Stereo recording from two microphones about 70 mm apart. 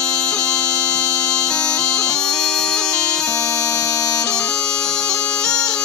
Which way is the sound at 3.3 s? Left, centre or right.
Left.